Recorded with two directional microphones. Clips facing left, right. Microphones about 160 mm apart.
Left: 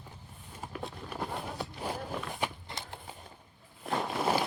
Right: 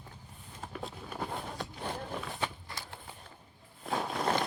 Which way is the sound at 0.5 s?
5° left (ahead or behind).